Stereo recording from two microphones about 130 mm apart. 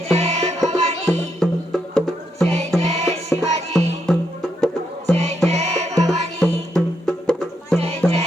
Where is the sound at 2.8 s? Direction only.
55° right (ahead or behind).